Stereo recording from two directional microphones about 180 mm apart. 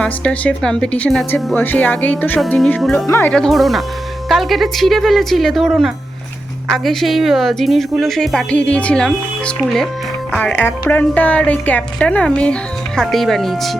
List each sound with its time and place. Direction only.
0.0 s a woman's voice: 5° left (ahead or behind)
10.3 s a woman's voice: 10° left (ahead or behind)